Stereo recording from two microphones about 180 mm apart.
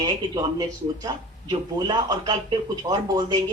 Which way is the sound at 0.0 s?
25° right (ahead or behind).